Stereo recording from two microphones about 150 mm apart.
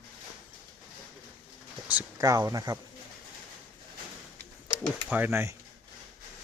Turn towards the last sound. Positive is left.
turn(degrees=-15)  # may be behind; listen again after turning